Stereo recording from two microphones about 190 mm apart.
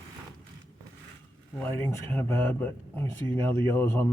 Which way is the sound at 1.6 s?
10° left (ahead or behind).